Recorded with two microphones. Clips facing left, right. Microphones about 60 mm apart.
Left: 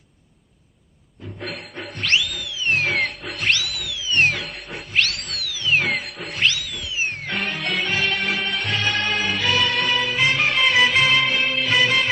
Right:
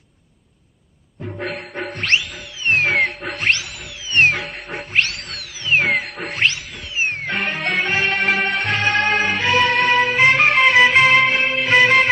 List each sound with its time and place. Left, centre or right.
1.9 s music: right